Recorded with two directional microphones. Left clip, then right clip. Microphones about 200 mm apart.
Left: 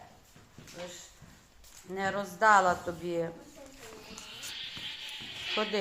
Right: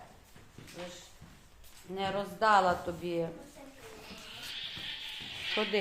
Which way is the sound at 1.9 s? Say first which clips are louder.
Left 2 dB; 20° left (ahead or behind).